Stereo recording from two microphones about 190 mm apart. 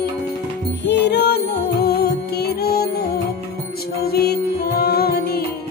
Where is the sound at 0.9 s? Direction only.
65° left (ahead or behind).